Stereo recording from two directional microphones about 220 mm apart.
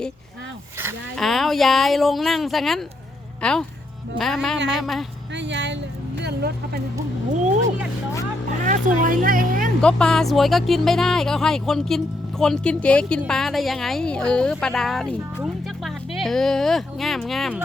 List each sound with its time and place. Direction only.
1.1 s speech: centre (ahead or behind)
5.3 s a sound: 55° right (ahead or behind)
6.2 s speech: 45° right (ahead or behind)
8.6 s speech: 35° right (ahead or behind)
9.8 s speech: 5° left (ahead or behind)